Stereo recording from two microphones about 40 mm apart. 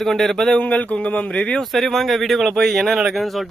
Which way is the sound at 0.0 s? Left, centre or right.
Centre.